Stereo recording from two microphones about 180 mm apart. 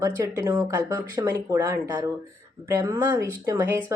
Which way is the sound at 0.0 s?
20° right (ahead or behind).